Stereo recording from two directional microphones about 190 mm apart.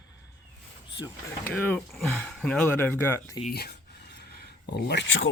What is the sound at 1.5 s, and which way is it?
Speech, 10° left (ahead or behind).